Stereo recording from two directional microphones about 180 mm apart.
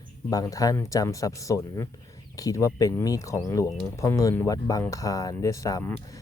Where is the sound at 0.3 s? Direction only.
20° left (ahead or behind).